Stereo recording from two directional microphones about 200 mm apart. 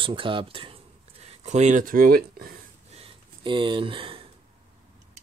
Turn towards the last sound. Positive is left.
turn(degrees=-25)  # may be behind; listen again after turning